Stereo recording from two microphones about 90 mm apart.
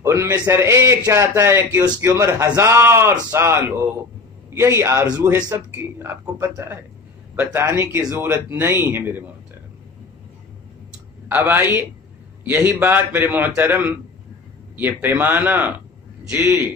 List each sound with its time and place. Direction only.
0.0 s a man's voice: 30° right (ahead or behind)
11.2 s a man's voice: 25° right (ahead or behind)